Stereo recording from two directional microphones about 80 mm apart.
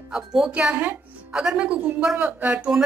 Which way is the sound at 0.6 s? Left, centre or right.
Centre.